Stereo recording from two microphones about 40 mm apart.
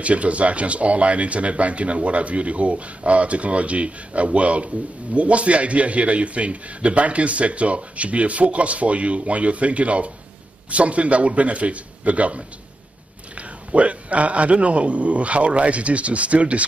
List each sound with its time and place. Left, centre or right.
0.0 s a man's voice: right
13.7 s a man's voice: right